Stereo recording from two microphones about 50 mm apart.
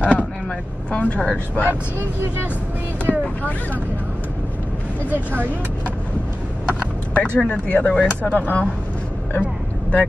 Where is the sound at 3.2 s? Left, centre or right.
Left.